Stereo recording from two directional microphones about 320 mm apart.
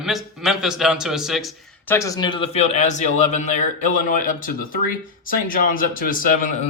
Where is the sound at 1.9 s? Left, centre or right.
Centre.